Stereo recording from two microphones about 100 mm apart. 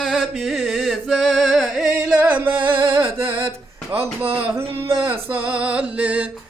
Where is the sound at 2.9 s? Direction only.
25° right (ahead or behind).